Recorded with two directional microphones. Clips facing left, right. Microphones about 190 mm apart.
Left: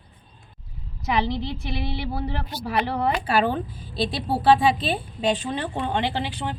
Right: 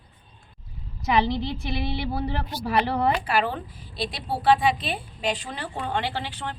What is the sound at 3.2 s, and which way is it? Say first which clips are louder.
A woman's voice: left 3 dB; 25° left (ahead or behind).